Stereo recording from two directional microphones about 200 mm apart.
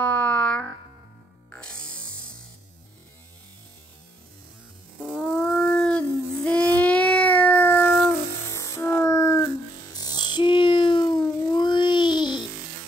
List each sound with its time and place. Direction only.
0.0 s music: 5° left (ahead or behind)
5.0 s dog: 5° left (ahead or behind)
8.5 s music: 15° left (ahead or behind)
9.9 s a sound: 20° left (ahead or behind)